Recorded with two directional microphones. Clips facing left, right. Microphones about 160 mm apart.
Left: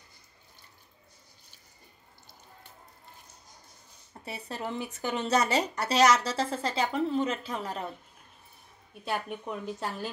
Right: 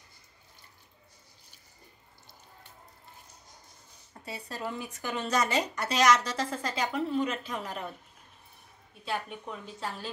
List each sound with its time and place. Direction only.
4.2 s speech: 25° left (ahead or behind)
9.1 s speech: 50° left (ahead or behind)